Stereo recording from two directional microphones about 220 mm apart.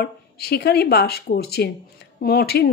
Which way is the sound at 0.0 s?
45° left (ahead or behind).